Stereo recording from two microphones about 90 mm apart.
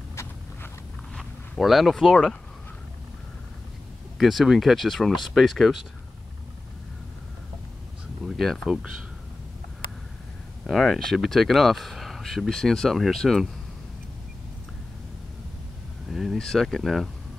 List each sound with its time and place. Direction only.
0.1 s a sound: 30° left (ahead or behind)
1.1 s speech: centre (ahead or behind)
4.2 s speech: centre (ahead or behind)
8.3 s speech: centre (ahead or behind)
10.7 s speech: centre (ahead or behind)
16.1 s speech: centre (ahead or behind)